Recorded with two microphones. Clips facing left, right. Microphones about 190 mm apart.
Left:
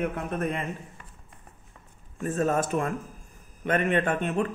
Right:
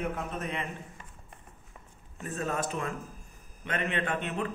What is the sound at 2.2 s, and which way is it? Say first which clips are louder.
Speech: left 7 dB; 45° left (ahead or behind).